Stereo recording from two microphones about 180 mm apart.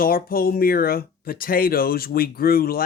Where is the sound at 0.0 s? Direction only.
55° left (ahead or behind).